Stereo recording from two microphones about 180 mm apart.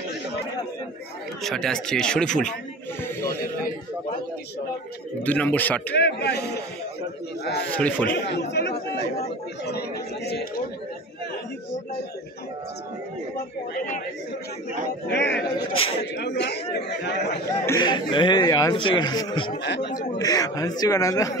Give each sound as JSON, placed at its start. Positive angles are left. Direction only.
{"t": 1.4, "sound": "speech", "side_deg": 0}
{"t": 5.2, "sound": "speech", "side_deg": 10}
{"t": 5.9, "sound": "speech", "side_deg": 70}
{"t": 7.7, "sound": "speech", "side_deg": 5}
{"t": 8.1, "sound": "speech", "side_deg": 65}
{"t": 15.0, "sound": "speech", "side_deg": 70}
{"t": 17.5, "sound": "speech", "side_deg": 20}
{"t": 19.6, "sound": "speech", "side_deg": 80}
{"t": 19.9, "sound": "speech", "side_deg": 20}